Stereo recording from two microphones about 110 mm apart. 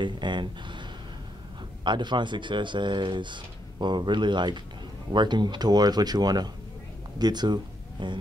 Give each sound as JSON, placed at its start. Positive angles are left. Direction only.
{"t": 0.0, "sound": "speech", "side_deg": -45}
{"t": 1.9, "sound": "speech", "side_deg": -45}